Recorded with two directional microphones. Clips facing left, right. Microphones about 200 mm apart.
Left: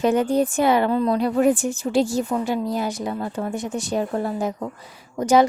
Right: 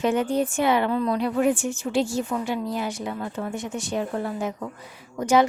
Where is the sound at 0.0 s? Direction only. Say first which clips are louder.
Left 4 dB; 40° left (ahead or behind).